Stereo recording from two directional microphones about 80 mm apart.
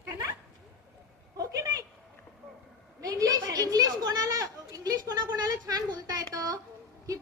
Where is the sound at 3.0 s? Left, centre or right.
Right.